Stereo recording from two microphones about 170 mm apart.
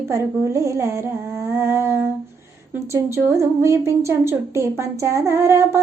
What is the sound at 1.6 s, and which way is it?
Humming, 15° right (ahead or behind).